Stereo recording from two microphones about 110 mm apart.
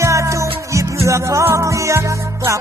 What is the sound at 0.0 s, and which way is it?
Music, 25° right (ahead or behind).